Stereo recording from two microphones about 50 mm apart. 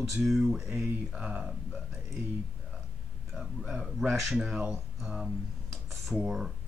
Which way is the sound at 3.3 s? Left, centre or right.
Centre.